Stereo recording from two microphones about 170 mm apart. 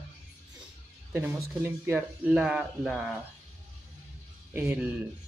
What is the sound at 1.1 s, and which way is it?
Speech, 10° right (ahead or behind).